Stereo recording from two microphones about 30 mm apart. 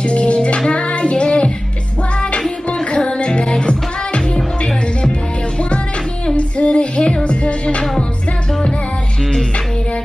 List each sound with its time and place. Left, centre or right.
0.0 s music: left
0.7 s child singing: left
2.9 s music: left
6.3 s female singing: left
7.2 s music: left